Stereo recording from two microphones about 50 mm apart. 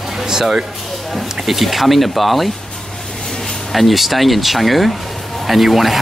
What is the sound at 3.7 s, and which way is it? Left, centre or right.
Speech, centre.